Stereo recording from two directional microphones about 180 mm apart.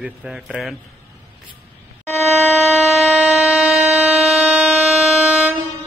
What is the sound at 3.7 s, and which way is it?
Train, centre (ahead or behind).